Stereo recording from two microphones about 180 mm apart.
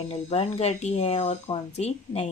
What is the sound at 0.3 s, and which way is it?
A woman's voice, 35° left (ahead or behind).